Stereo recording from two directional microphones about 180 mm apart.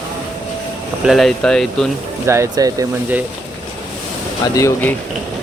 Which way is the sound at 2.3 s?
15° right (ahead or behind).